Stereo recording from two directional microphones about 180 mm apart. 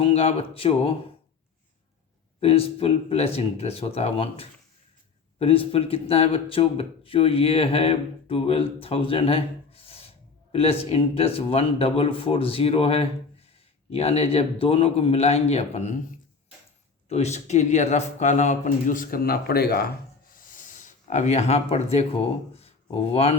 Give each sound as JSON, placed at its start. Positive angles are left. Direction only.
{"t": 0.0, "sound": "speech", "side_deg": 35}
{"t": 2.4, "sound": "speech", "side_deg": 35}
{"t": 17.1, "sound": "a man's voice", "side_deg": 35}
{"t": 20.3, "sound": "a sound", "side_deg": 45}